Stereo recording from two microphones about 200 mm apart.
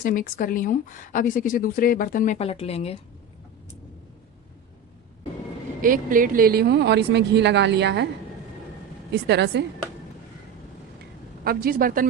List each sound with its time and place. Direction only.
0.0 s speech: 45° left (ahead or behind)
5.8 s speech: 45° right (ahead or behind); by 8.0 s 60° right (ahead or behind)
9.1 s speech: 60° right (ahead or behind)
11.4 s speech: 45° right (ahead or behind)